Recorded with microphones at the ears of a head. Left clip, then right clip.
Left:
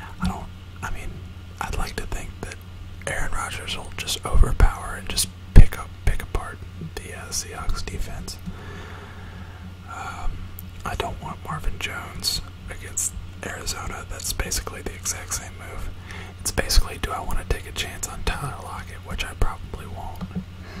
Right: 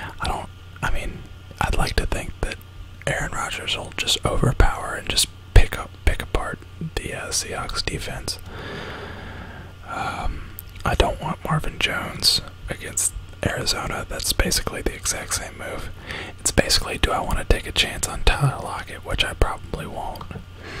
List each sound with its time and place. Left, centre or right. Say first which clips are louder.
0.4 s whispering: right 6 dB; right
1.6 s speech: right 7 dB; right
3.6 s speech: right 6 dB; right
8.5 s a sound: right 7 dB; right
9.8 s gasp: right 6 dB; right
10.8 s speech: right 7 dB; right